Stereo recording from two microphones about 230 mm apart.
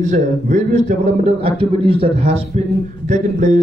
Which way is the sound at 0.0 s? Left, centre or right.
Right.